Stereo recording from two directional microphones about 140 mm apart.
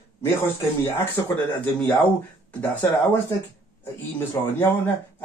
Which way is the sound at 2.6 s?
15° left (ahead or behind).